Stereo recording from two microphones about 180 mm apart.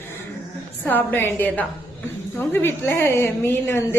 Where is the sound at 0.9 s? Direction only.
10° left (ahead or behind).